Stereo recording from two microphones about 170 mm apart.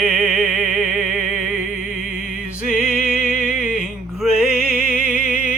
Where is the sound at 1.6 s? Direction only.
45° right (ahead or behind).